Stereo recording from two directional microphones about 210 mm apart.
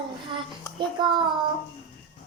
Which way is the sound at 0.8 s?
20° right (ahead or behind).